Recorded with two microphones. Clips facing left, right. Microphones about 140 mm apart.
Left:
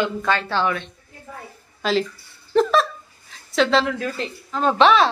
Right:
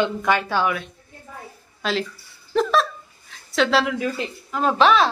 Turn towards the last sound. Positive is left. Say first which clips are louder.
# left 1 dB
turn(degrees=0)  # may be behind; listen again after turning